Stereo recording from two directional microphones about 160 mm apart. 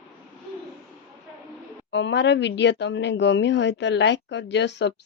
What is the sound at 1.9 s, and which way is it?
Speech, 90° left.